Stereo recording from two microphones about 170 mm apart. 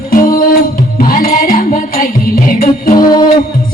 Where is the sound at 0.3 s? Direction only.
55° left (ahead or behind).